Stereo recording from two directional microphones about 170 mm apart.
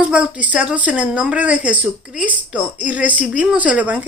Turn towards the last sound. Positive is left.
turn(degrees=-10)  # may be behind; listen again after turning